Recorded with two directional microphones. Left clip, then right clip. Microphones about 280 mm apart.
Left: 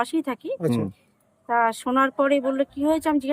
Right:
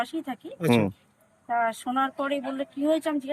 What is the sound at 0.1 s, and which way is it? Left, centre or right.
Speech, centre.